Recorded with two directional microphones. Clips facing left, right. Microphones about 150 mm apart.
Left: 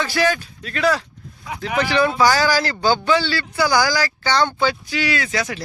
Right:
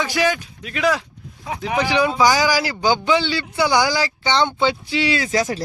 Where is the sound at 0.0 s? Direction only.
15° right (ahead or behind).